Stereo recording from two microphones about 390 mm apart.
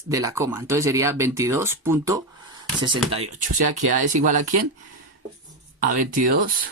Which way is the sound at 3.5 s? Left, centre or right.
Right.